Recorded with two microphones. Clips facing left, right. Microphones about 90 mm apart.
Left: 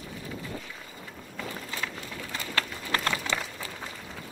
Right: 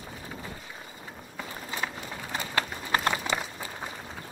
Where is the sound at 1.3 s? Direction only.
25° right (ahead or behind).